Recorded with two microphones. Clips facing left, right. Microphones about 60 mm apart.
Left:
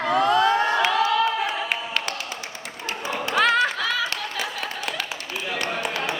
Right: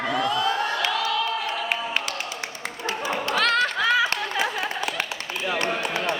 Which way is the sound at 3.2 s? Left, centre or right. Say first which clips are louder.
Left 3 dB; centre.